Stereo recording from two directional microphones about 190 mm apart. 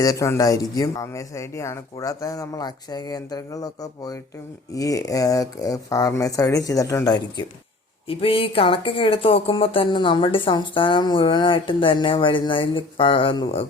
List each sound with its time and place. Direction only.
0.0 s speech: 15° left (ahead or behind)